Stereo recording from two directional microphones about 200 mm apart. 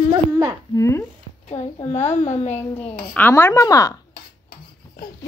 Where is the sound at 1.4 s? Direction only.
35° left (ahead or behind).